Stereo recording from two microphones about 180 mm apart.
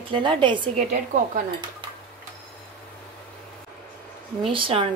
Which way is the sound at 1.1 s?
45° right (ahead or behind).